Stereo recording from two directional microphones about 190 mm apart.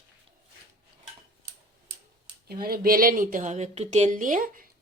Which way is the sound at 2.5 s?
55° right (ahead or behind).